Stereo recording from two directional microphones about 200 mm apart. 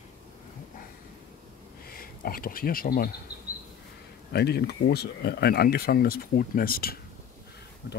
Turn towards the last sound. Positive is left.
turn(degrees=60)  # may be behind; listen again after turning